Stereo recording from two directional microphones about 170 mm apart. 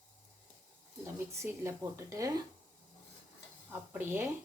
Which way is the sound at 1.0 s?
15° right (ahead or behind).